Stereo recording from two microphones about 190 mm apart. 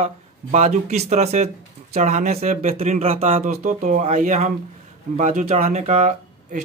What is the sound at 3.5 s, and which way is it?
Speech, 40° right (ahead or behind).